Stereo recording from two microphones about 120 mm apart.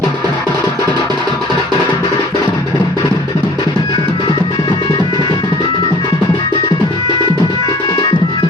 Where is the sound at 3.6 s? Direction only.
35° left (ahead or behind).